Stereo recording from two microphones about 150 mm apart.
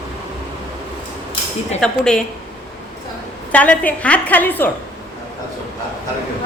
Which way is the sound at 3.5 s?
10° left (ahead or behind).